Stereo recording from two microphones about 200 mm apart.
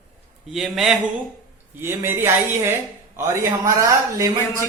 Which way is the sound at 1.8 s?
10° right (ahead or behind).